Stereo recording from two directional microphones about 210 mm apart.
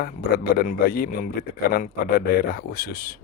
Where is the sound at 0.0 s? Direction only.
45° left (ahead or behind).